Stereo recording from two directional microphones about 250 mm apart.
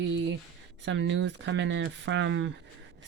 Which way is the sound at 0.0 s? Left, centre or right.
Right.